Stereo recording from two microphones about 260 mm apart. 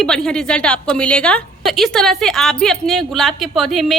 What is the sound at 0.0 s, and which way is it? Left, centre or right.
A woman's voice, centre.